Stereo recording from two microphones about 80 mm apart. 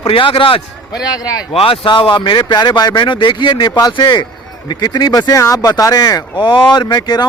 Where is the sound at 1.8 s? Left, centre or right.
Left.